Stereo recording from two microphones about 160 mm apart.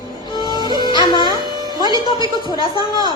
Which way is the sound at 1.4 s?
25° right (ahead or behind).